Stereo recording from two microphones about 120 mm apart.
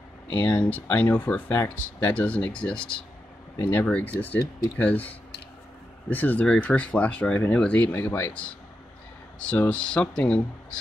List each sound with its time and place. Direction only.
0.3 s speech: 15° left (ahead or behind)
9.5 s speech: 10° left (ahead or behind)